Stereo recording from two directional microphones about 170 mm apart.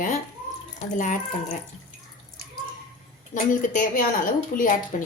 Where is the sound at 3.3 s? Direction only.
50° left (ahead or behind).